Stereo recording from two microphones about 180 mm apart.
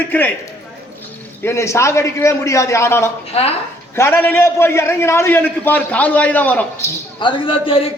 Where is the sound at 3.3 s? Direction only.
35° left (ahead or behind).